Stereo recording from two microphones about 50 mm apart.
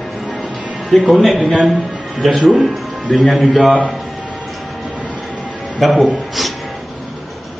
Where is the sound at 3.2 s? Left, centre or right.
Centre.